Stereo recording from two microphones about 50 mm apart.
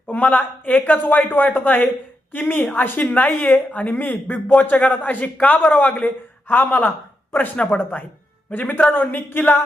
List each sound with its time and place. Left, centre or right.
0.1 s speech: left
8.5 s speech: left